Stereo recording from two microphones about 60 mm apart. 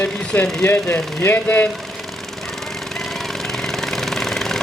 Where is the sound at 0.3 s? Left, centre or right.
Left.